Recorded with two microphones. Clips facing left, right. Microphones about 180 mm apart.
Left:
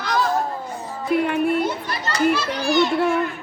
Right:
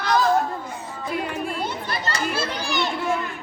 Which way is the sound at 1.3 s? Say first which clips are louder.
Left 9 dB; 60° left (ahead or behind).